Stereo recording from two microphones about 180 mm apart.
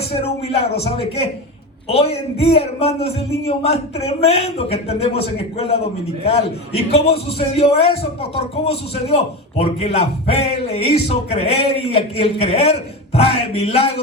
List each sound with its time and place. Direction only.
0.1 s a man's voice: 35° left (ahead or behind)